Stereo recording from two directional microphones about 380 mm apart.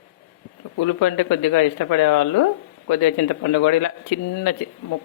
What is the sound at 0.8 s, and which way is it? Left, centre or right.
Speech, left.